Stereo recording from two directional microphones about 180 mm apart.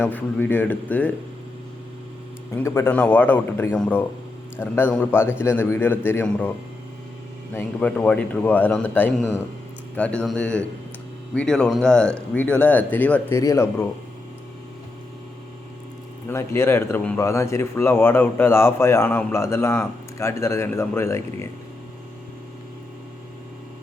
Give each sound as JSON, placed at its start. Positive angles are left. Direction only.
{"t": 0.0, "sound": "speech", "side_deg": 10}
{"t": 2.5, "sound": "speech", "side_deg": 15}
{"t": 7.5, "sound": "speech", "side_deg": 10}
{"t": 16.2, "sound": "speech", "side_deg": 15}